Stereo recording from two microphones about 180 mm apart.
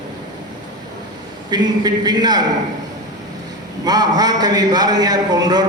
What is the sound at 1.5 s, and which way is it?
Speech, 25° right (ahead or behind).